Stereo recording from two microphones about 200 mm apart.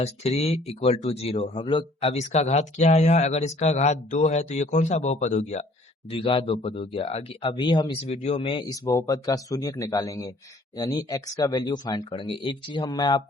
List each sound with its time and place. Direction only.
0.0 s speech: 30° left (ahead or behind)